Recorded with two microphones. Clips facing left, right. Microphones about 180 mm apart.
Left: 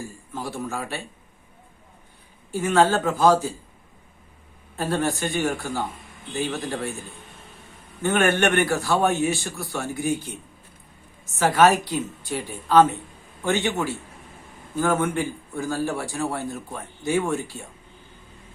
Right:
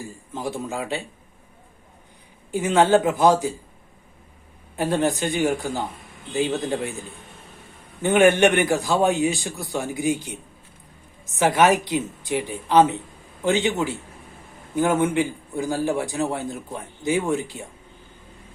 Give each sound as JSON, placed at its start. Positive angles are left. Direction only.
{"t": 0.3, "sound": "a man's voice", "side_deg": -20}
{"t": 2.5, "sound": "a man's voice", "side_deg": -20}
{"t": 4.8, "sound": "a man's voice", "side_deg": -15}
{"t": 8.0, "sound": "a man's voice", "side_deg": -15}